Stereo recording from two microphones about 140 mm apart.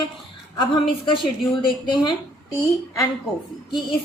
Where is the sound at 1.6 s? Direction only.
30° left (ahead or behind).